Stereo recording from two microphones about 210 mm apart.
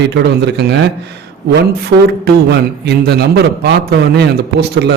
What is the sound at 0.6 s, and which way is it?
Speech, 55° right (ahead or behind).